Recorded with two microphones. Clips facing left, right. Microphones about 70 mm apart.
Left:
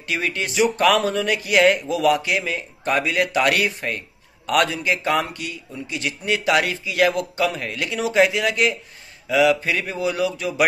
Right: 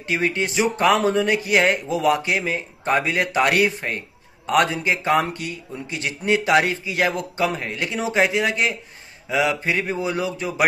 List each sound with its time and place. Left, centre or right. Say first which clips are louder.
0.0 s speech: right 3 dB; right